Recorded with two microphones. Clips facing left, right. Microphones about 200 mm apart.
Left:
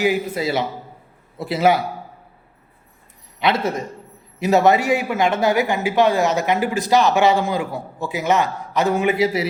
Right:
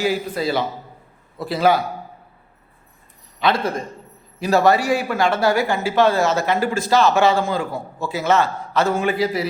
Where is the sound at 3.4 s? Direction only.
25° left (ahead or behind).